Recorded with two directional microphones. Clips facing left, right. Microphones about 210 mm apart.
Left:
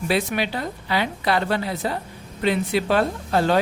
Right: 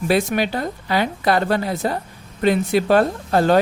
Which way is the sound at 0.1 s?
45° right (ahead or behind).